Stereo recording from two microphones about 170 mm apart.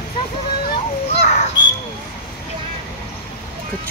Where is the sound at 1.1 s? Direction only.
40° left (ahead or behind).